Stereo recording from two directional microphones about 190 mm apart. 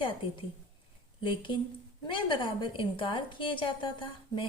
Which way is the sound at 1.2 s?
25° left (ahead or behind).